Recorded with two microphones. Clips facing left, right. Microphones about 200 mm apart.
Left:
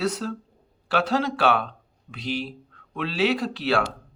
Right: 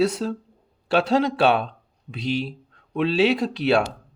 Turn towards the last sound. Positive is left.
turn(degrees=-20)  # may be behind; listen again after turning